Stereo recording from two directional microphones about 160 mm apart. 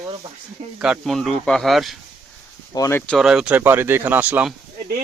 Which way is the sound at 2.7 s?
20° left (ahead or behind).